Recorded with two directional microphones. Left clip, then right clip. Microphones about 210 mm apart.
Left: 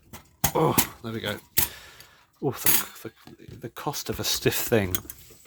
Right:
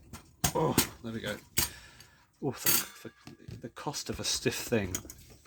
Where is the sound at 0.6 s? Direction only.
35° left (ahead or behind).